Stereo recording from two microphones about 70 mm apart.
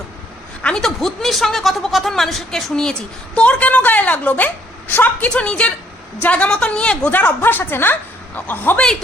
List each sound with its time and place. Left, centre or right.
0.6 s speech: centre
3.3 s a woman's voice: centre
7.1 s a woman's voice: left